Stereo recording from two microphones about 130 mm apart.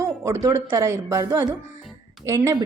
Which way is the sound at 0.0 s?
20° right (ahead or behind).